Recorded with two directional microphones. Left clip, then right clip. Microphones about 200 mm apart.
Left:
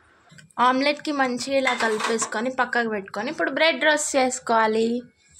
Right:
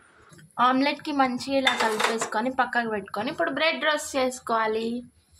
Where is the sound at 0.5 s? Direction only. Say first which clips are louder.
Left 2 dB; 10° left (ahead or behind).